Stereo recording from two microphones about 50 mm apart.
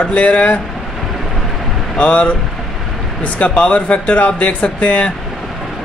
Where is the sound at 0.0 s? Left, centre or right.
Left.